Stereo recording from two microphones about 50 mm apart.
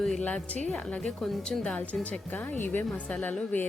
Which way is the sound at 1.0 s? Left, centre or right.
Centre.